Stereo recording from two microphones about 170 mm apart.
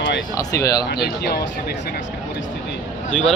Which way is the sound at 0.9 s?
65° left (ahead or behind).